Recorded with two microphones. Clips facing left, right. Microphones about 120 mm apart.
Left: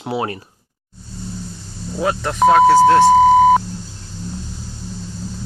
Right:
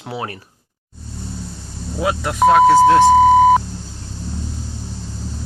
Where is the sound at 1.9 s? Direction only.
5° right (ahead or behind).